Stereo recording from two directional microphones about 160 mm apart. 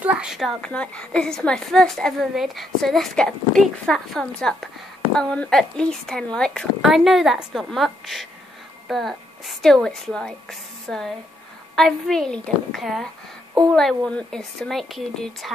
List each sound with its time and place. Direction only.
0.0 s a woman's voice: 5° right (ahead or behind)